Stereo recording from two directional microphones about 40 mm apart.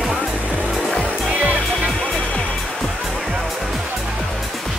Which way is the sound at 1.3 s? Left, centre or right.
Right.